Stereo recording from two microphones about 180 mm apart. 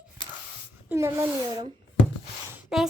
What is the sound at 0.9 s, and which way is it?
Speech, 15° right (ahead or behind).